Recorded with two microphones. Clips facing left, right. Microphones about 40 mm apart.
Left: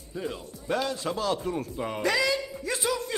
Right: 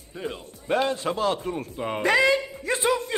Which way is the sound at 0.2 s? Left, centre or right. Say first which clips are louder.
Right 1 dB; right.